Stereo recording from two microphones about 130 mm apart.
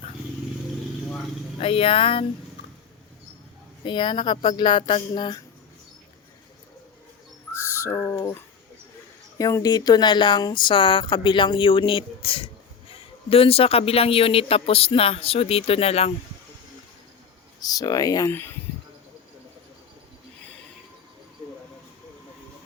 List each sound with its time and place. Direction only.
1.5 s speech: 45° left (ahead or behind)
3.8 s speech: 35° left (ahead or behind)
7.6 s a sound: 20° left (ahead or behind)
9.4 s speech: 25° left (ahead or behind); by 16.1 s 55° left (ahead or behind)
17.6 s speech: 30° left (ahead or behind)
18.3 s speech: 15° left (ahead or behind)